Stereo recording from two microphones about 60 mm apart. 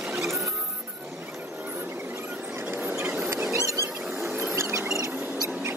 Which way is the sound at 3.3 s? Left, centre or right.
Right.